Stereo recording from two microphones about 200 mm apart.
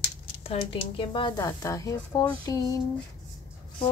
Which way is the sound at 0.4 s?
30° left (ahead or behind).